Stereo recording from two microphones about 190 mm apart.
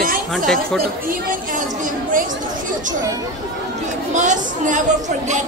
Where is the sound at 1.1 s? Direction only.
45° right (ahead or behind).